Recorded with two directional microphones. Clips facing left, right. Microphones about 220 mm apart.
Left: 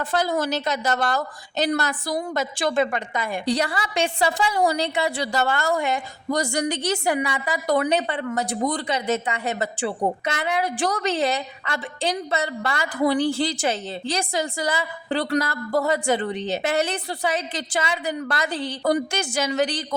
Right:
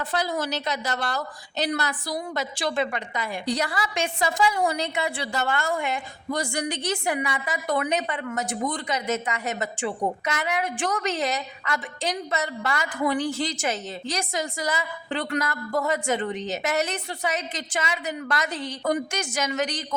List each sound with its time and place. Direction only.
0.0 s a woman's voice: 50° left (ahead or behind)
3.4 s a woman's voice: 30° left (ahead or behind)